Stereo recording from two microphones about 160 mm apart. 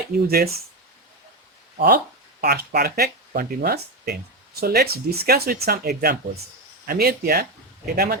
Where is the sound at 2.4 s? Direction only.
75° right (ahead or behind).